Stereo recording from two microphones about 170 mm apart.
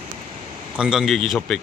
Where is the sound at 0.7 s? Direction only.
5° right (ahead or behind).